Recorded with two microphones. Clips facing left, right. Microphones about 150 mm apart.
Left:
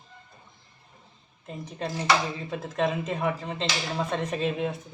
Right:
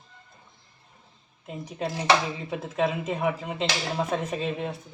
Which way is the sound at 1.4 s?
10° right (ahead or behind).